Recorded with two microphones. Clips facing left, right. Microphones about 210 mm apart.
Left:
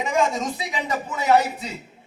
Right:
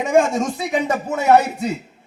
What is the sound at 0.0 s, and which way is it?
A man's voice, 50° right (ahead or behind).